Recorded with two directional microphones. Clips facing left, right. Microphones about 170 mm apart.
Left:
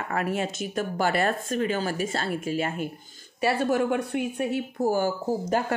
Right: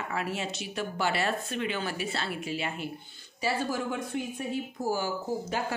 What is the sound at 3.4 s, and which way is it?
Speech, 60° left (ahead or behind).